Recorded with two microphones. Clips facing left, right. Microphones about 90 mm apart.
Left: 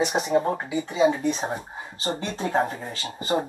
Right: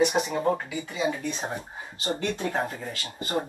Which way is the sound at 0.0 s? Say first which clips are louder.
Left 1 dB; 30° left (ahead or behind).